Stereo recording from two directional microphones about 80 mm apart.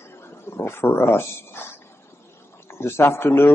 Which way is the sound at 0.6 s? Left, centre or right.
Left.